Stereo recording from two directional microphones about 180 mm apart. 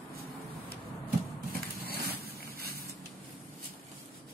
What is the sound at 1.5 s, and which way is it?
Vehicle, 60° right (ahead or behind).